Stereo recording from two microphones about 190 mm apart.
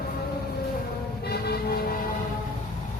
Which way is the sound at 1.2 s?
55° left (ahead or behind).